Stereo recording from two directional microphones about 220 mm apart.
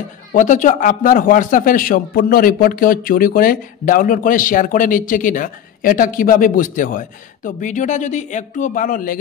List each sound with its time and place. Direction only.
0.3 s a man's voice: 35° left (ahead or behind)